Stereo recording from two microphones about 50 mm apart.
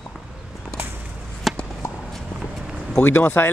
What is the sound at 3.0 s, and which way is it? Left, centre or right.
Speech, left.